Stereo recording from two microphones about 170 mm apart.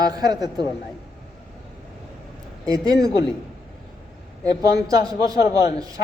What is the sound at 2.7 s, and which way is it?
Speech, 20° right (ahead or behind).